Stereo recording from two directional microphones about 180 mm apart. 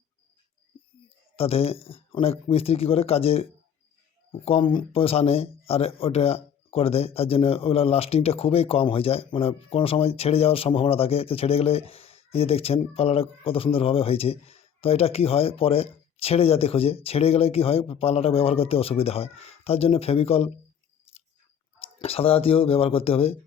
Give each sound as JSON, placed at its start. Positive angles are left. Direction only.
{"t": 1.4, "sound": "speech", "side_deg": 35}
{"t": 21.1, "sound": "chewing", "side_deg": 35}
{"t": 21.9, "sound": "speech", "side_deg": 35}